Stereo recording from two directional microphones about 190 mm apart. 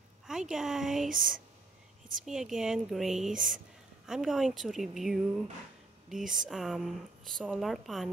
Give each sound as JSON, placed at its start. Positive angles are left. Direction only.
{"t": 0.3, "sound": "speech", "side_deg": -5}
{"t": 1.1, "sound": "speech", "side_deg": -45}
{"t": 2.2, "sound": "speech", "side_deg": 0}